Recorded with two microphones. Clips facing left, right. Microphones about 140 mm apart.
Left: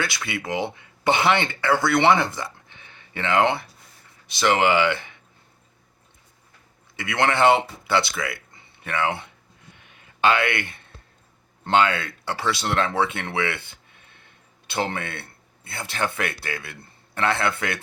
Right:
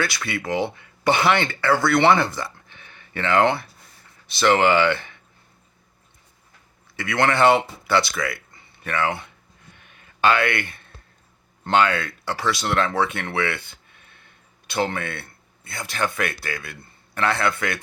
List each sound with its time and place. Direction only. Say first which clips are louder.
0.0 s speech: right 2 dB; 20° left (ahead or behind)
6.9 s speech: right 1 dB; 20° left (ahead or behind)